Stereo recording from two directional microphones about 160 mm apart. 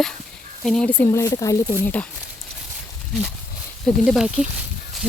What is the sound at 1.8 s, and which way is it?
Speech, 10° left (ahead or behind).